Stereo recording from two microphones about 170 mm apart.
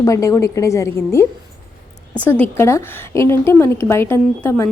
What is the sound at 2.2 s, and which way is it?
A woman's voice, 10° left (ahead or behind).